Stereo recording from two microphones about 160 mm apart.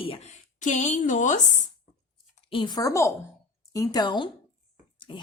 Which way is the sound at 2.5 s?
30° left (ahead or behind).